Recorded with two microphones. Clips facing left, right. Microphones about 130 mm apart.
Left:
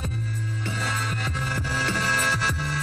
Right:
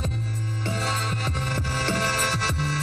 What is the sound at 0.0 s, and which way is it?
Music, 30° right (ahead or behind).